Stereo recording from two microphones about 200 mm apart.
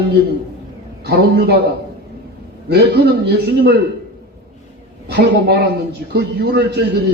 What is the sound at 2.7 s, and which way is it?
A man's voice, 55° right (ahead or behind).